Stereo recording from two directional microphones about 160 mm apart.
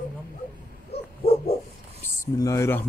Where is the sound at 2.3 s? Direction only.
20° left (ahead or behind).